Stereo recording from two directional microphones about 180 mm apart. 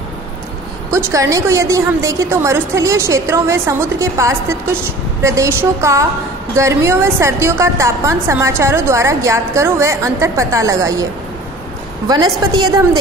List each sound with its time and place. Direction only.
0.9 s a woman's voice: 15° right (ahead or behind)
12.1 s a woman's voice: 20° right (ahead or behind)